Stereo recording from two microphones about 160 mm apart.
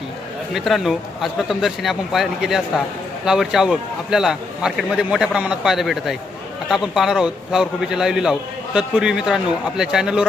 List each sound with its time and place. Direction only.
0.5 s a man's voice: centre (ahead or behind)